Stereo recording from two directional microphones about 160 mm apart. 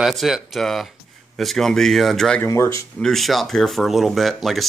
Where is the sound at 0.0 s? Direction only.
Centre (ahead or behind).